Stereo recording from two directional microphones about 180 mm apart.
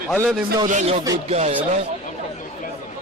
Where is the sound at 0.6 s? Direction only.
40° right (ahead or behind).